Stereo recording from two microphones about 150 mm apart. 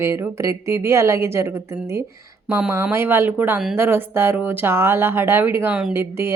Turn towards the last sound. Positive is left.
turn(degrees=-10)  # may be behind; listen again after turning